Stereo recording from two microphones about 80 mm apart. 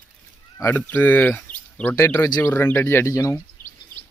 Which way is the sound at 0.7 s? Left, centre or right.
Left.